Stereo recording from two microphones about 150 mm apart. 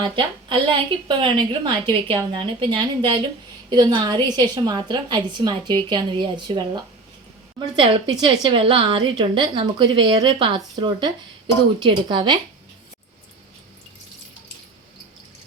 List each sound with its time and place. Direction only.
0.2 s a woman's voice: 35° right (ahead or behind)